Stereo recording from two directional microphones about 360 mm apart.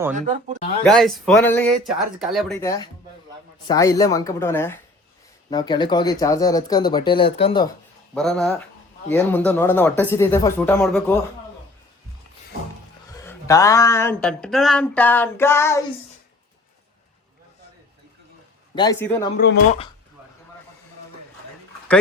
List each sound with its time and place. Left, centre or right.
0.1 s speech: right
0.9 s speech: centre
8.1 s speech: centre
13.1 s speech: centre
18.7 s speech: centre